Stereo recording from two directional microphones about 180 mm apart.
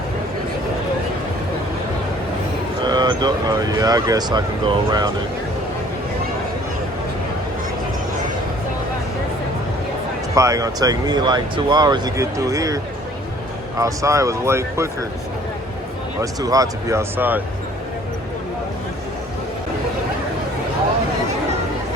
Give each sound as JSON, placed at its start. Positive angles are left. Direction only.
{"t": 2.8, "sound": "speech", "side_deg": -25}
{"t": 10.3, "sound": "speech", "side_deg": -15}
{"t": 16.2, "sound": "speech", "side_deg": -20}